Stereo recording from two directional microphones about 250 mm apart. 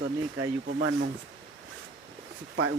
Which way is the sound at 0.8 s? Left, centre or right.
Right.